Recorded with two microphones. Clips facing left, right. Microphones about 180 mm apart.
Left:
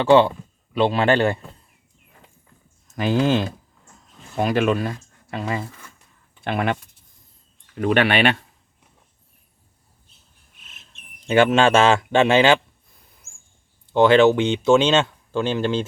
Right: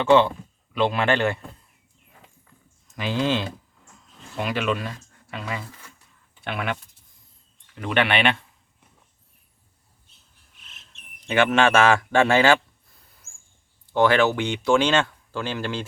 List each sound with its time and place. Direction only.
0.0 s speech: 35° left (ahead or behind)
2.8 s speech: 50° left (ahead or behind)
7.8 s speech: 45° left (ahead or behind)
11.3 s speech: 30° left (ahead or behind)
13.9 s speech: 20° left (ahead or behind)